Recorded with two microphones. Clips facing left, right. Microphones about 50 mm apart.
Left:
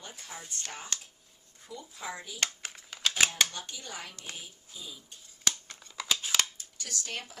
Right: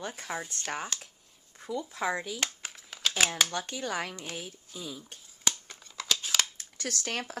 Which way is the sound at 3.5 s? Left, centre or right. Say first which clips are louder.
Right 9 dB; right.